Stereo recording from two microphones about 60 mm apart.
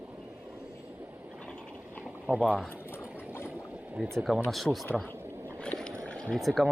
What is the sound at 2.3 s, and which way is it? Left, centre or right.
Speech, left.